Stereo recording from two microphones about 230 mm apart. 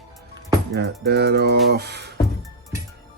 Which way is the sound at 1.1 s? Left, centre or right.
Right.